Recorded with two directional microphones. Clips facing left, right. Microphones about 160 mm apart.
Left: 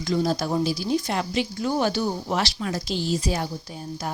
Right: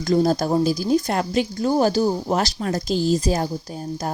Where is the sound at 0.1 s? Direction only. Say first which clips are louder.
Right 5 dB; 45° right (ahead or behind).